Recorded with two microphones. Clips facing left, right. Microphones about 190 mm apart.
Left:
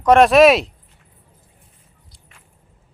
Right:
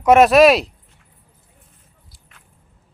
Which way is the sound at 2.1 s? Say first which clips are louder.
Left 1 dB; centre (ahead or behind).